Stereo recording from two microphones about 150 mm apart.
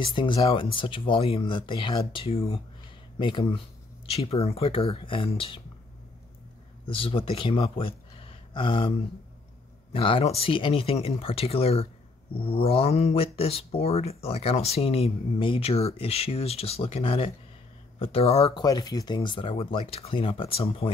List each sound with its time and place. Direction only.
0.0 s speech: 35° left (ahead or behind)
6.9 s speech: 35° left (ahead or behind)
9.9 s speech: 35° left (ahead or behind)
18.5 s speech: 25° left (ahead or behind)